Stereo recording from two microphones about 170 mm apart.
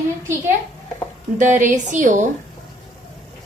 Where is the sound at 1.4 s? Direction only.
45° right (ahead or behind).